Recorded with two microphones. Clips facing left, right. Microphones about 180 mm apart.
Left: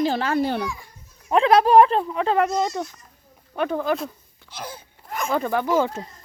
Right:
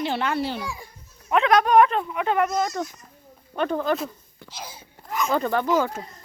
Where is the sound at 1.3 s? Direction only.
30° left (ahead or behind).